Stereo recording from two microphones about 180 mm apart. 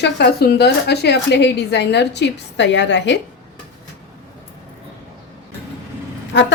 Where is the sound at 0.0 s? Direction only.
60° left (ahead or behind).